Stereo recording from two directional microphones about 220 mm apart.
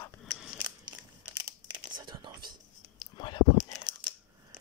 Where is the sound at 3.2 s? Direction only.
20° left (ahead or behind).